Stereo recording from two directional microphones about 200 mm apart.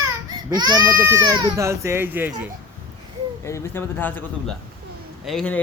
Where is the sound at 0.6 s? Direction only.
20° right (ahead or behind).